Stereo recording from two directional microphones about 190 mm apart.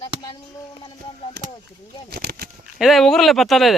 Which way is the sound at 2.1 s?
55° right (ahead or behind).